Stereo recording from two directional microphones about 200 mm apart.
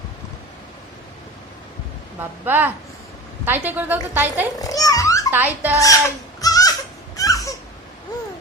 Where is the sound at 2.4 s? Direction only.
10° right (ahead or behind).